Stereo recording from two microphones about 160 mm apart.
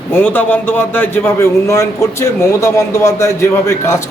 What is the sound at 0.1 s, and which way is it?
A man's voice, 10° left (ahead or behind).